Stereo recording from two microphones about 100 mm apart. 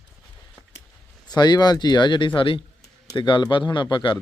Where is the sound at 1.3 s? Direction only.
45° left (ahead or behind).